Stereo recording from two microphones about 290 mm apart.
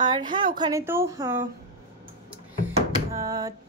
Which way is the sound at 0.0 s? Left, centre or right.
Centre.